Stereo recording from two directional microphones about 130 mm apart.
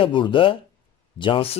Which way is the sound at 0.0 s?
40° left (ahead or behind).